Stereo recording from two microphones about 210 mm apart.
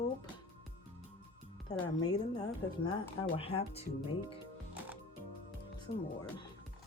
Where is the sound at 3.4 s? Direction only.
30° left (ahead or behind).